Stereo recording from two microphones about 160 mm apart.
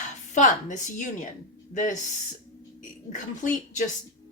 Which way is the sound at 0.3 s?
50° left (ahead or behind).